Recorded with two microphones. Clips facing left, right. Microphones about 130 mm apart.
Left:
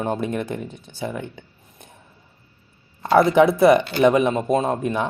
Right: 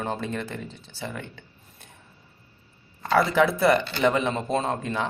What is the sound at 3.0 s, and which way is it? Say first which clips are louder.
Speech: left 6 dB; 20° left (ahead or behind).